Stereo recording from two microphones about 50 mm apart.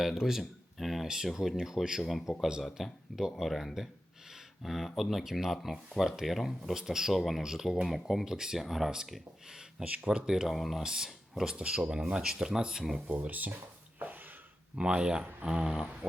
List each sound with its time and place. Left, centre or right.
0.0 s speech: centre
9.8 s speech: right
10.1 s speech: centre
10.5 s speech: centre
10.8 s speech: centre
13.2 s speech: right
14.8 s speech: centre